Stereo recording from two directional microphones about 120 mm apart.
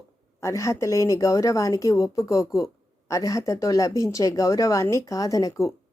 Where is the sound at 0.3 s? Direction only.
25° left (ahead or behind).